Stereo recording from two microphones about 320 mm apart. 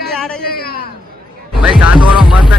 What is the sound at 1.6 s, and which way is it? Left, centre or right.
Music, centre.